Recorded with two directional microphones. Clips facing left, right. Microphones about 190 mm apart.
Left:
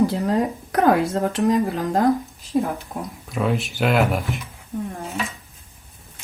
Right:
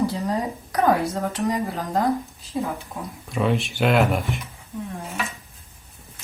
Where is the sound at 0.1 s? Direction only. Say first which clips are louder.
Left 4 dB; 55° left (ahead or behind).